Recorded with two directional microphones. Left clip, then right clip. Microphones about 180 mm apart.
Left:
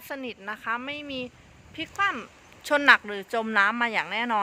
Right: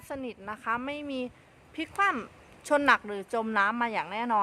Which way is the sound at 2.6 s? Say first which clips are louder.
Left 4 dB; centre (ahead or behind).